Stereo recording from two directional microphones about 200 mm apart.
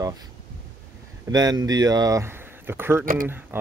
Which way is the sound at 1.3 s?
20° right (ahead or behind).